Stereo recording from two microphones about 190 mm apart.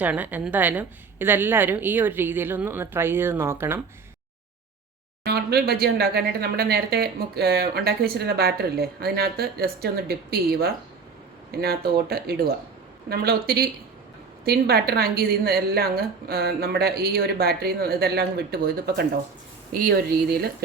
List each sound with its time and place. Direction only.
0.0 s a woman's voice: 10° right (ahead or behind)
5.2 s speech: 55° right (ahead or behind)